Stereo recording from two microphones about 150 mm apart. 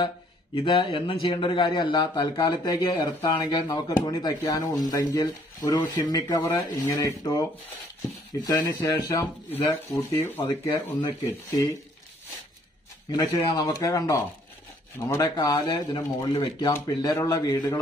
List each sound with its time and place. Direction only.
0.7 s speech: 35° left (ahead or behind)
8.5 s speech: 25° left (ahead or behind)
13.1 s speech: 30° left (ahead or behind)